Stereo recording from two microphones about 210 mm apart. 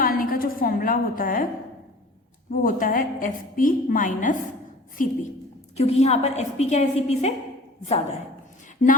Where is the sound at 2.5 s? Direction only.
40° left (ahead or behind).